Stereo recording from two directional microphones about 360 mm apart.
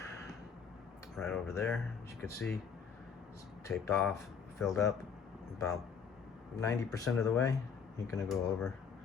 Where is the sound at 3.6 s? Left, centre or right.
Centre.